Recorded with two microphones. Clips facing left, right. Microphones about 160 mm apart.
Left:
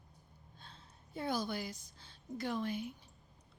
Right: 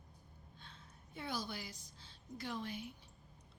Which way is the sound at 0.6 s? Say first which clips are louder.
Left 2 dB; 35° left (ahead or behind).